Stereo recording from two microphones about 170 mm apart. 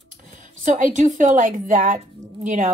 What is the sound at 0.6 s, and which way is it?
A woman's voice, 45° right (ahead or behind).